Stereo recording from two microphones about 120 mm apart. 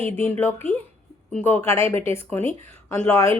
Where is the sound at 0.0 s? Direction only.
15° left (ahead or behind).